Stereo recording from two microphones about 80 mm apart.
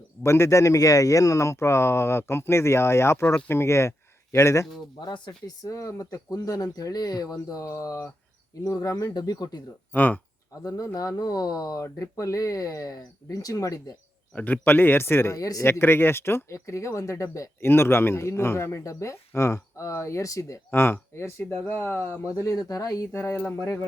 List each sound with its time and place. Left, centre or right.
0.2 s a man's voice: left
4.9 s speech: left
5.6 s speech: left
9.9 s speech: left
10.6 s speech: left
14.3 s speech: left
15.4 s speech: left
15.6 s a man's voice: left
20.7 s a man's voice: left
22.2 s speech: left
23.1 s a man's voice: left
23.6 s a man's voice: left